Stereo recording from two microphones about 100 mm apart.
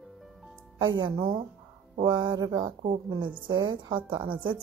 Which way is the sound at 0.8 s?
50° right (ahead or behind).